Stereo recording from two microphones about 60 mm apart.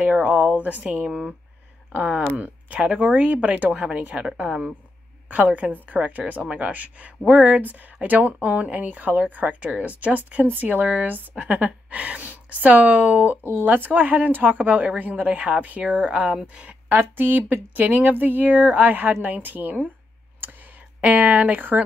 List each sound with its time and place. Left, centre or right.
0.0 s a woman's voice: right
4.3 s a woman's voice: centre
5.3 s a woman's voice: right
21.0 s a woman's voice: right